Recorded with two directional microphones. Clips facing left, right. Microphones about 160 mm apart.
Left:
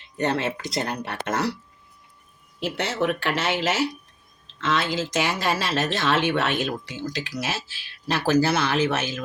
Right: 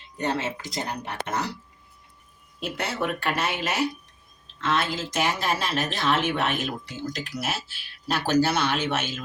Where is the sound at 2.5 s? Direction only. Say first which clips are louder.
Left 4 dB; 75° left (ahead or behind).